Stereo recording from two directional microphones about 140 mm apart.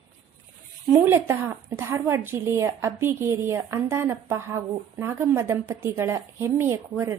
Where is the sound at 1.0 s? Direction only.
15° right (ahead or behind).